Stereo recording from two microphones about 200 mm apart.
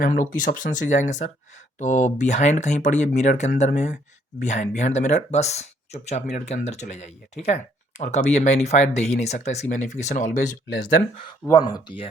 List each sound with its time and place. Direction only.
0.0 s speech: 45° left (ahead or behind)
11.4 s speech: 20° left (ahead or behind)